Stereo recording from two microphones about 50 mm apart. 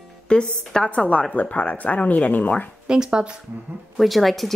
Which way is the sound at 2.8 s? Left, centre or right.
Centre.